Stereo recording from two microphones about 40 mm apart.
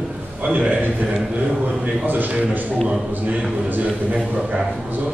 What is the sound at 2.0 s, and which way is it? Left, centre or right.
A man's voice, right.